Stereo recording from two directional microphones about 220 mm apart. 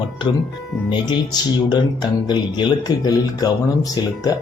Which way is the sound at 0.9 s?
20° left (ahead or behind).